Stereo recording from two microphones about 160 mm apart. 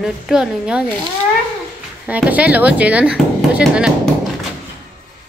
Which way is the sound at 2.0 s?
10° right (ahead or behind).